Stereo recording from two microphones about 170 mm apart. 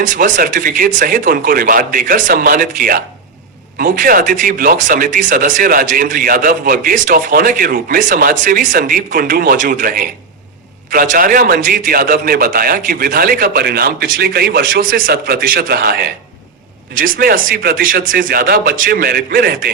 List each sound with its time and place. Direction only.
0.0 s a man's voice: 50° right (ahead or behind)